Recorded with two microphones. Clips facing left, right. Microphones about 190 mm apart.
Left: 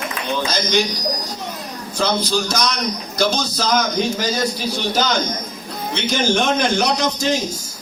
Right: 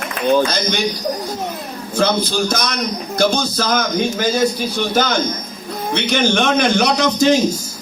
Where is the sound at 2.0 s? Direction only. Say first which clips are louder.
Right 3 dB; 55° right (ahead or behind).